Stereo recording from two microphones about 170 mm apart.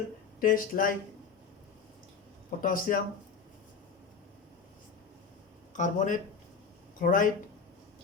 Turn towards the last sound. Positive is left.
turn(degrees=50)  # may be behind; listen again after turning